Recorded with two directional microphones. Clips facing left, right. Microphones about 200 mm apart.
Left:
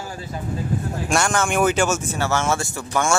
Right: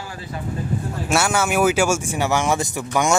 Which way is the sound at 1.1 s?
5° right (ahead or behind).